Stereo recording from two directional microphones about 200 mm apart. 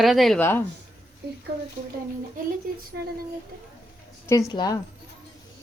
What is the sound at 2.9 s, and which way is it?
Speech, 60° right (ahead or behind).